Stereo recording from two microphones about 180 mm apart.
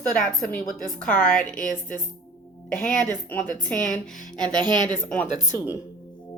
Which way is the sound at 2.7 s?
10° left (ahead or behind).